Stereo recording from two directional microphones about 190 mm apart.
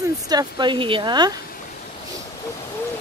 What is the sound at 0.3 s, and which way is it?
Speech, 20° right (ahead or behind).